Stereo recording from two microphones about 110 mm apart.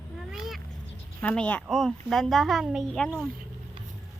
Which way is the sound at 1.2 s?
10° left (ahead or behind).